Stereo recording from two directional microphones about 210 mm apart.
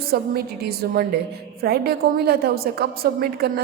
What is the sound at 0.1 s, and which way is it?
A woman's voice, 50° right (ahead or behind).